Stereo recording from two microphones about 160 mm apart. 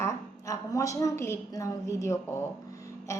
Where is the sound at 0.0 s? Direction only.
20° left (ahead or behind).